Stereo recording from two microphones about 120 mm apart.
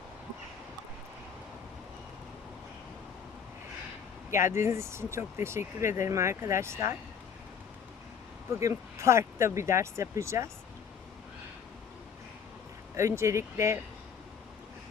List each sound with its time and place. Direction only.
4.4 s speech: 20° right (ahead or behind)
8.4 s speech: 25° right (ahead or behind)
13.0 s speech: 25° right (ahead or behind)